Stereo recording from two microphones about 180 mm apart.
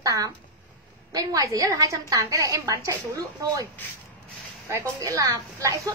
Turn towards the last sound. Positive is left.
turn(degrees=-20)  # may be behind; listen again after turning